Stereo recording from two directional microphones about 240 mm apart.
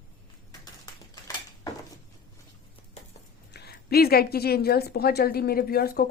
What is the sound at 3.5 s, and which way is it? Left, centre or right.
A woman's voice, left.